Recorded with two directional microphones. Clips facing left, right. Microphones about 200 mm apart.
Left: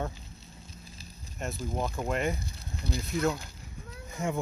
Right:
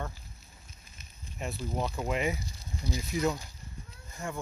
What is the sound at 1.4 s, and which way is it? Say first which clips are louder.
Speech: left 1 dB; centre (ahead or behind).